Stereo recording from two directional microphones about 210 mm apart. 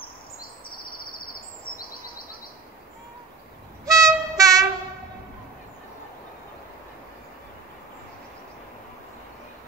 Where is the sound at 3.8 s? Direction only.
15° right (ahead or behind).